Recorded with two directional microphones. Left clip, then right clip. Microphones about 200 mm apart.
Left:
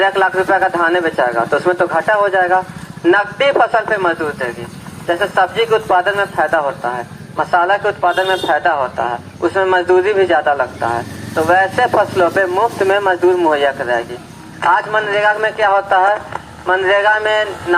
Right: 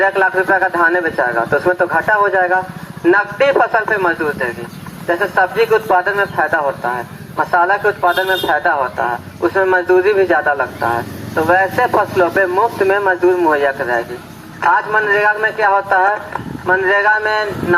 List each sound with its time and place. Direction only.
0.0 s a man's voice: 25° left (ahead or behind)